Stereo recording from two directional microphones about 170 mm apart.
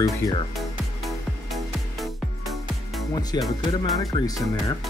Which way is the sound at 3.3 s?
25° left (ahead or behind).